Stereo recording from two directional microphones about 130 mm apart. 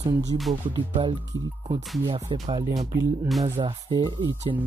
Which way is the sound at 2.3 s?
45° right (ahead or behind).